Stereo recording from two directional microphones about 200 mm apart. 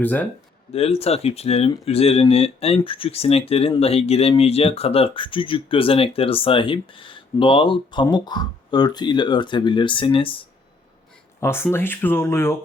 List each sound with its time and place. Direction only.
0.0 s speech: 10° left (ahead or behind)
0.7 s speech: 30° left (ahead or behind)
11.3 s speech: 10° left (ahead or behind)